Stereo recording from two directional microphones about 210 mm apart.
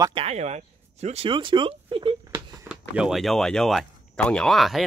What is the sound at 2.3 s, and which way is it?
Speech, 5° right (ahead or behind).